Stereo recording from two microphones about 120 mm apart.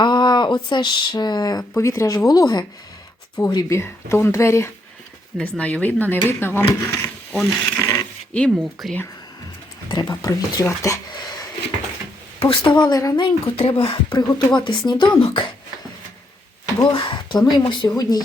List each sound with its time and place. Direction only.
0.0 s speech: 40° left (ahead or behind)
1.7 s speech: 25° left (ahead or behind)
2.1 s speech: 35° left (ahead or behind)
5.4 s speech: 10° left (ahead or behind)
7.3 s speech: centre (ahead or behind)
7.8 s a sound: 25° left (ahead or behind)
8.3 s speech: 5° left (ahead or behind)
9.9 s speech: 35° left (ahead or behind)
11.1 s a sound: 35° left (ahead or behind)
12.4 s speech: 45° left (ahead or behind)
13.2 s speech: 50° left (ahead or behind)
14.2 s speech: 40° left (ahead or behind)
16.8 s speech: 40° left (ahead or behind)